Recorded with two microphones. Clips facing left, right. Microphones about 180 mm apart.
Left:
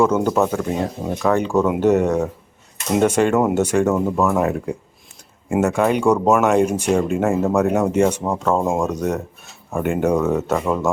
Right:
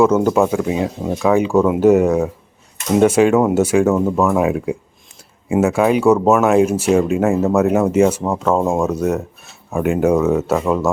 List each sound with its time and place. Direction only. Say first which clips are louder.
0.0 s speech: right 3 dB; 5° right (ahead or behind)